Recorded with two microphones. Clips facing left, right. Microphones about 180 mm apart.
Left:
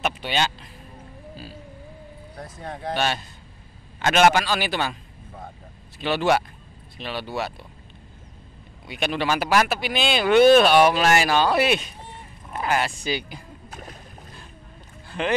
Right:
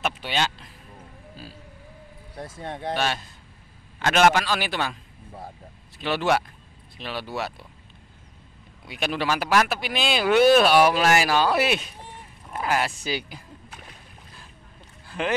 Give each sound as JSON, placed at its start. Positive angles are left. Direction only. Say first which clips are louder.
{"t": 0.0, "sound": "speech", "louder": "left 2 dB", "side_deg": 0}
{"t": 2.3, "sound": "speech", "louder": "right 2 dB", "side_deg": -25}
{"t": 2.9, "sound": "speech", "louder": "left 2 dB", "side_deg": 0}
{"t": 5.9, "sound": "speech", "louder": "left 2 dB", "side_deg": 0}
{"t": 8.8, "sound": "speech", "louder": "left 2 dB", "side_deg": 0}
{"t": 13.7, "sound": "boat", "louder": "left 6 dB", "side_deg": 40}
{"t": 15.0, "sound": "a sound", "louder": "left 1 dB", "side_deg": -5}